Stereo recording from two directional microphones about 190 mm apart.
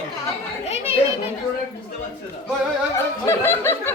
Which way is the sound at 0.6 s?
35° left (ahead or behind).